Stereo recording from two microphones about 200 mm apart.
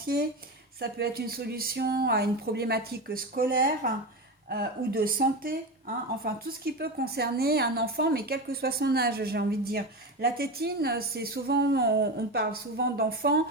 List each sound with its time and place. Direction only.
0.8 s a woman's voice: 50° right (ahead or behind)